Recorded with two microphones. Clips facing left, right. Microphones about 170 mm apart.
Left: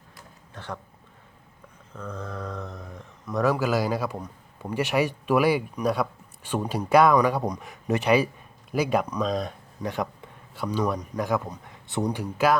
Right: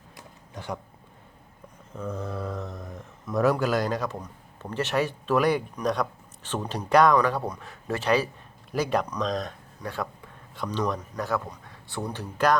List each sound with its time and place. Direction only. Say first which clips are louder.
0.5 s speech: right 2 dB; 10° right (ahead or behind)
2.0 s speech: right 3 dB; 10° right (ahead or behind)
9.8 s speech: left 3 dB; 15° left (ahead or behind)